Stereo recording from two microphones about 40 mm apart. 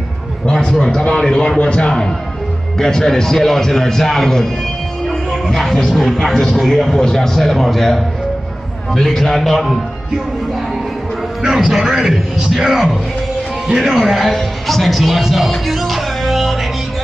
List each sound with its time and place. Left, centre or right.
0.5 s a man's voice: centre
5.3 s music: centre
5.9 s speech: centre
11.4 s speech: centre
13.9 s speech: centre